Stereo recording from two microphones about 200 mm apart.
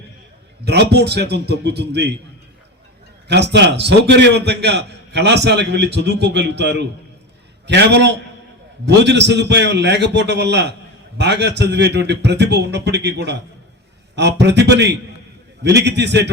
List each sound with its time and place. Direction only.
0.6 s a man's voice: 55° right (ahead or behind)
3.2 s a man's voice: 60° right (ahead or behind)